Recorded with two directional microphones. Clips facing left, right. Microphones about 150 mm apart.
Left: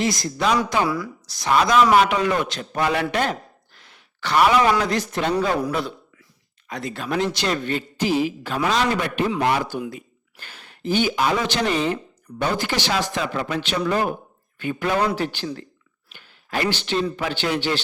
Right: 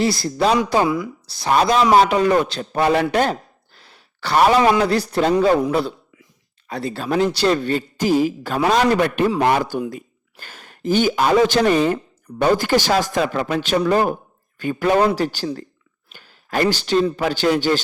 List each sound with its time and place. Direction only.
0.0 s speech: 30° right (ahead or behind)
0.9 s a man's voice: 20° right (ahead or behind); by 5.3 s 35° right (ahead or behind)
6.7 s a man's voice: 30° right (ahead or behind)